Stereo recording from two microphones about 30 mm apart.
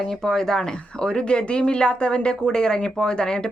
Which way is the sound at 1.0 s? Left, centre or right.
Left.